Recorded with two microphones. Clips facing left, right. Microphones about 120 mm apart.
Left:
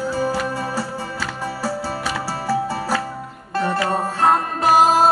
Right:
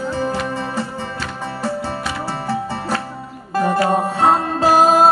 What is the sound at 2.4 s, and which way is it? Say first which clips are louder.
Music: left 3 dB; 5° left (ahead or behind).